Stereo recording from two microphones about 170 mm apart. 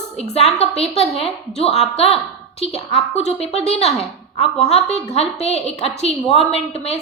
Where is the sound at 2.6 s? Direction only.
35° left (ahead or behind).